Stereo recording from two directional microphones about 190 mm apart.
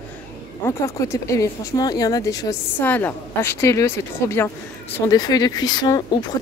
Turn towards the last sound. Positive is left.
turn(degrees=20)  # may be behind; listen again after turning